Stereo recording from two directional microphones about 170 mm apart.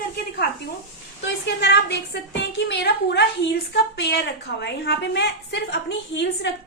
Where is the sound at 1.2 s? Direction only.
90° left.